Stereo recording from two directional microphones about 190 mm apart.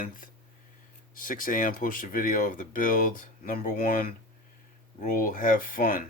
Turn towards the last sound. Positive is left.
turn(degrees=45)  # may be behind; listen again after turning